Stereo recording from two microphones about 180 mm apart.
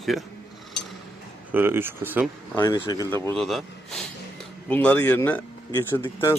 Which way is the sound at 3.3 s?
Centre (ahead or behind).